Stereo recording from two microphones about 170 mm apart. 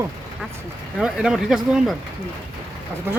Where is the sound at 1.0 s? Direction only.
5° right (ahead or behind).